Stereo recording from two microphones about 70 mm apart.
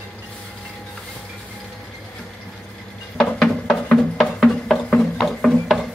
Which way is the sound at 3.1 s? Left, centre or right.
Centre.